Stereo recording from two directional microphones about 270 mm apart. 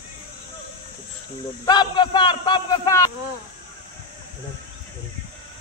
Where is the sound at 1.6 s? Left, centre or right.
Centre.